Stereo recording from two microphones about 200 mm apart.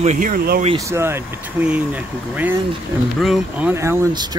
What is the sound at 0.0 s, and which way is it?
Speech, 40° right (ahead or behind).